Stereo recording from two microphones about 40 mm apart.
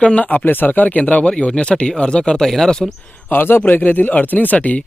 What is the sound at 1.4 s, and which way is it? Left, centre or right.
Speech, left.